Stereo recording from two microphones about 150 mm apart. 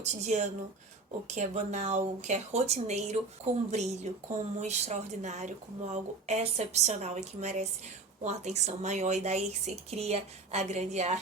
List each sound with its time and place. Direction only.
0.0 s speech: 50° right (ahead or behind)